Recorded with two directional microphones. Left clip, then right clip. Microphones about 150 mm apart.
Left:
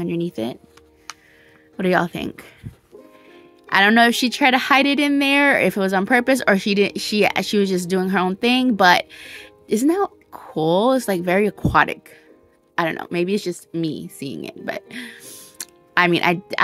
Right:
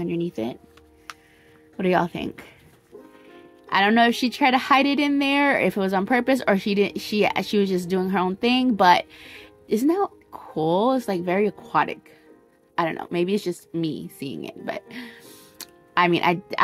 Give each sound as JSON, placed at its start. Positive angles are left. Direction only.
{"t": 0.0, "sound": "speech", "side_deg": 30}
{"t": 1.8, "sound": "speech", "side_deg": 25}
{"t": 12.7, "sound": "speech", "side_deg": 25}